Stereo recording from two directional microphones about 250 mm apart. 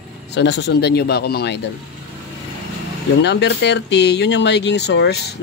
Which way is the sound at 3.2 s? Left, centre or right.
Left.